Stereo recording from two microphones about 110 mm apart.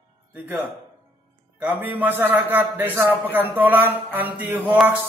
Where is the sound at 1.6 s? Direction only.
15° right (ahead or behind).